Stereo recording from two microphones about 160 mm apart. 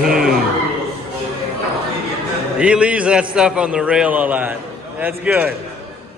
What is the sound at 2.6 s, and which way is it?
A man's voice, 5° right (ahead or behind).